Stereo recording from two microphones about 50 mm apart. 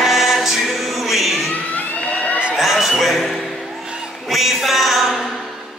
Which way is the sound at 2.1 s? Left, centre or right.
Left.